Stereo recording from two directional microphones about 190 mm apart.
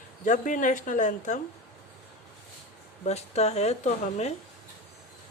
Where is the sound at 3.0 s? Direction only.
35° left (ahead or behind).